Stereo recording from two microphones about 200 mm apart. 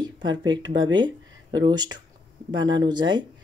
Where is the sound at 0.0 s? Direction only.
20° right (ahead or behind).